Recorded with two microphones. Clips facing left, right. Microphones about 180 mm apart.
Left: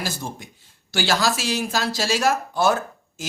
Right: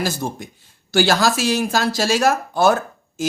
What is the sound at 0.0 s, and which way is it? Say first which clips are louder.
Speech: right 6 dB; 50° right (ahead or behind).